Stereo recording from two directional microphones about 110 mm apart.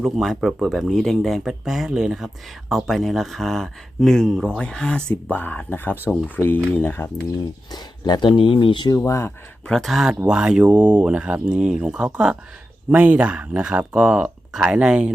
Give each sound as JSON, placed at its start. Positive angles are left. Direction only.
{"t": 0.0, "sound": "speech", "side_deg": 0}
{"t": 7.7, "sound": "speech", "side_deg": 40}
{"t": 8.3, "sound": "speech", "side_deg": 50}
{"t": 9.0, "sound": "speech", "side_deg": 25}
{"t": 9.6, "sound": "speech", "side_deg": 5}